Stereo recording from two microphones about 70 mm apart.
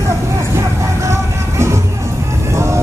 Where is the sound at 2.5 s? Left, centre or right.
Right.